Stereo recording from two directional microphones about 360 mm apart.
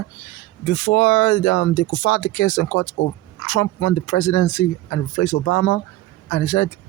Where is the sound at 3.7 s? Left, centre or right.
Left.